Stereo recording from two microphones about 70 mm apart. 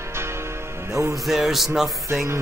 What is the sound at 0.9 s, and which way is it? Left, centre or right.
Music, right.